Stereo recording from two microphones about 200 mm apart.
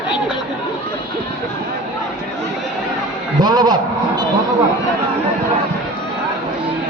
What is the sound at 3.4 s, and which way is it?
Speech, 20° right (ahead or behind).